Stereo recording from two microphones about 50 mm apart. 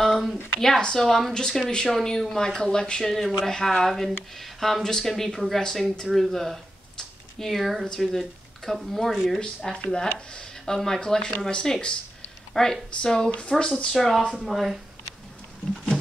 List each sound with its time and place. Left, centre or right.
0.0 s a sound: centre
0.6 s speech: centre
13.9 s speech: centre
15.7 s wild animals: centre